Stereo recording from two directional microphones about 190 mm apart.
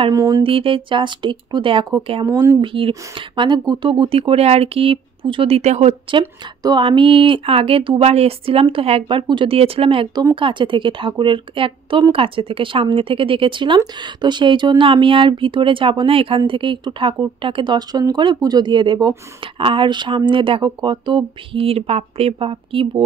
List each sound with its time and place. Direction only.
0.0 s speech: 20° right (ahead or behind)
2.6 s speech: 30° right (ahead or behind)
6.6 s speech: 25° right (ahead or behind)